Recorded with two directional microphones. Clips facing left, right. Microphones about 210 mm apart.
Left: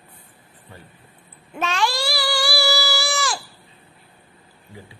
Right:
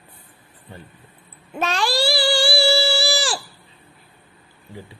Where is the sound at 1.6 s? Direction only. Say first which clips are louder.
Right 2 dB; 35° right (ahead or behind).